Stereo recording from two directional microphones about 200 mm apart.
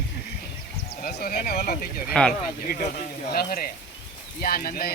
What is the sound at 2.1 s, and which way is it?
Speech, 5° left (ahead or behind).